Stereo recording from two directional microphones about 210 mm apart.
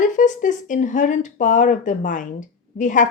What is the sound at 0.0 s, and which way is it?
Speech, 35° left (ahead or behind).